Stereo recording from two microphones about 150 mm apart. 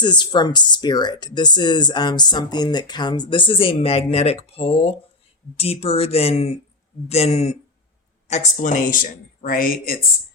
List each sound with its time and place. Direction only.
0.0 s speech: 30° left (ahead or behind); by 10.1 s 75° left (ahead or behind)